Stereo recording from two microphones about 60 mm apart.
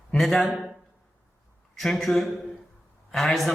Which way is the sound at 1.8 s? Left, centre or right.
Centre.